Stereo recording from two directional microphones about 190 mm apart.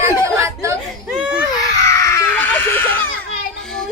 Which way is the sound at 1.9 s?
15° left (ahead or behind).